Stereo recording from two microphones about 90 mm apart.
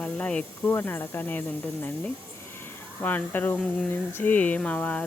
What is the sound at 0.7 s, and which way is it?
Speech, 25° left (ahead or behind).